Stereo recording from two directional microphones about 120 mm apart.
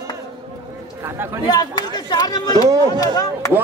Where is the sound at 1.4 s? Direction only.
35° left (ahead or behind).